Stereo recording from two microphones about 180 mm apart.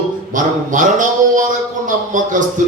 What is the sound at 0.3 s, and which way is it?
Speech, 45° right (ahead or behind).